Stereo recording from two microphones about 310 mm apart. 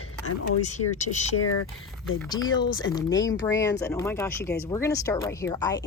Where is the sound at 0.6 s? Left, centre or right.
Left.